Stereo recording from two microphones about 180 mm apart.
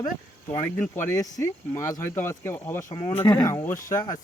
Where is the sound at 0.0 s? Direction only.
20° left (ahead or behind).